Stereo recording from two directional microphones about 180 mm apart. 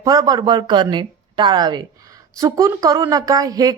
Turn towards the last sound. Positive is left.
turn(degrees=-20)  # may be behind; listen again after turning